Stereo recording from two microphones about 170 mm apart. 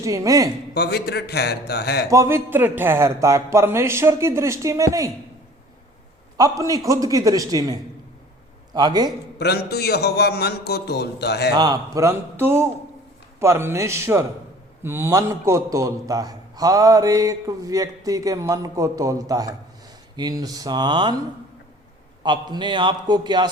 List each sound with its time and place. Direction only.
0.0 s a man's voice: 20° right (ahead or behind)
0.7 s a man's voice: 70° left (ahead or behind)
2.0 s speech: 15° right (ahead or behind)
6.3 s a man's voice: 20° right (ahead or behind)
9.4 s a man's voice: 70° left (ahead or behind)
11.5 s a man's voice: 25° right (ahead or behind)
22.2 s a man's voice: 25° right (ahead or behind)